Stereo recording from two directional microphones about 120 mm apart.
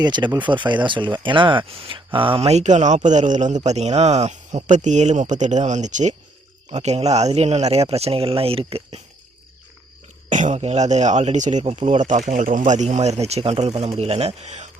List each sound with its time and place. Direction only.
0.0 s speech: 35° right (ahead or behind)
2.5 s speech: 70° right (ahead or behind); by 6.1 s 85° right
6.7 s speech: 60° right (ahead or behind)
10.2 s speech: 90° right
10.6 s speech: 70° right (ahead or behind); by 11.6 s 85° right
11.6 s speech: 55° right (ahead or behind)
11.9 s speech: 85° right